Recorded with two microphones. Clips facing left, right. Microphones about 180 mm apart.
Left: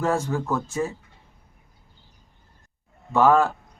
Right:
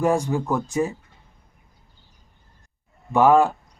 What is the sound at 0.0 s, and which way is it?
Speech, 15° right (ahead or behind).